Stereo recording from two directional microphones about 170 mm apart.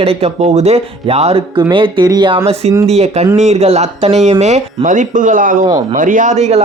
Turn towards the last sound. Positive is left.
turn(degrees=-40)  # may be behind; listen again after turning